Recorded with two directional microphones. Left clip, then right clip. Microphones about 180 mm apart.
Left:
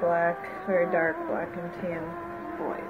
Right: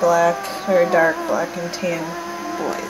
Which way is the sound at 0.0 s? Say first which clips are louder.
Right 9 dB; 20° right (ahead or behind).